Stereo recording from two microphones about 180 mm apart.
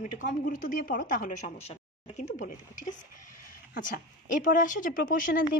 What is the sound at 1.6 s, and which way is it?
A woman's voice, 35° left (ahead or behind).